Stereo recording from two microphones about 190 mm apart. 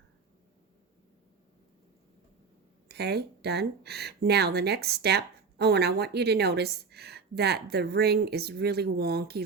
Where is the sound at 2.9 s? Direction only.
60° right (ahead or behind).